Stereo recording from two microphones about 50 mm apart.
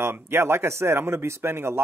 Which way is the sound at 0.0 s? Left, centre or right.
Right.